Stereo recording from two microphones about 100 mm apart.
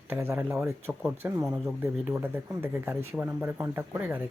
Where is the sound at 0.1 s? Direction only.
25° right (ahead or behind).